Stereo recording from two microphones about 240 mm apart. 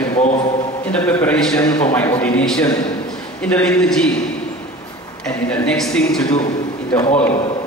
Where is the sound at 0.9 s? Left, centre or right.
Centre.